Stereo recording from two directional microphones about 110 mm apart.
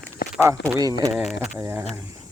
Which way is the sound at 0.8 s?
35° right (ahead or behind).